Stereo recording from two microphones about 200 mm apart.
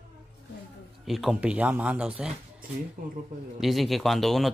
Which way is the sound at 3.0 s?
45° right (ahead or behind).